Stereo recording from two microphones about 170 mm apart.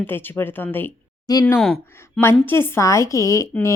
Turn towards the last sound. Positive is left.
turn(degrees=15)  # may be behind; listen again after turning